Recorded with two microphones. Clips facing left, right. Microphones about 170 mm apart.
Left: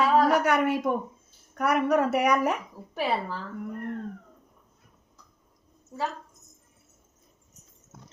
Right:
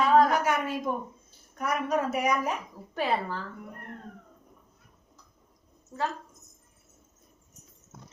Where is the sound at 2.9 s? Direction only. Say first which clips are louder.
Even; 5° left (ahead or behind).